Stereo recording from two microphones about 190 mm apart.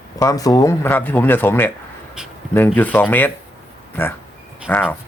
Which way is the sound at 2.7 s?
10° left (ahead or behind).